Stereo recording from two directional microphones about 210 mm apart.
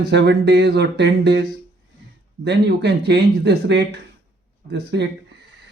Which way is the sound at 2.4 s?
55° right (ahead or behind).